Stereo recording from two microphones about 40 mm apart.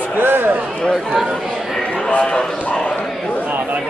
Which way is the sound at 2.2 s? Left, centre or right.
Left.